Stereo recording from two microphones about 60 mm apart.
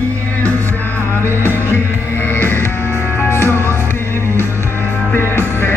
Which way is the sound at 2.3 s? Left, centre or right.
Left.